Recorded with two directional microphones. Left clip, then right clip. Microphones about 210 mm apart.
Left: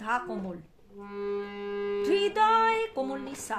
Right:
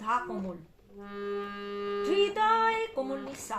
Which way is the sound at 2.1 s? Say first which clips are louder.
Left 2 dB; 55° left (ahead or behind).